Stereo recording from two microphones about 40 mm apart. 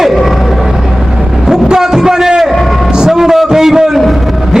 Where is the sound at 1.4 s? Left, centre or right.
Centre.